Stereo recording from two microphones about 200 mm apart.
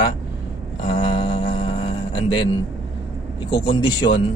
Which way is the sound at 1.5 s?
25° left (ahead or behind).